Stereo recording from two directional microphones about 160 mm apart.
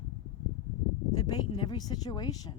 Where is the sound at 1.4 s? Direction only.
30° left (ahead or behind).